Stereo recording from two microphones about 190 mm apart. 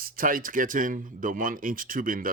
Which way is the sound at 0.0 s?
45° right (ahead or behind).